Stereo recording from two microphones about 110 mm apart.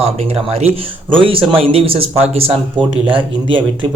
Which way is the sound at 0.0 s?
70° right (ahead or behind).